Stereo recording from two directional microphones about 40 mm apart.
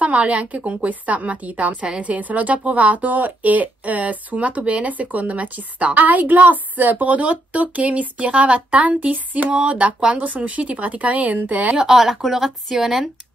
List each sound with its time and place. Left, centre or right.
0.0 s a woman's voice: right
11.7 s speech: centre